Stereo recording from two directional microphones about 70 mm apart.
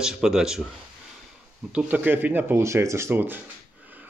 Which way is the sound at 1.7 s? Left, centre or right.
Centre.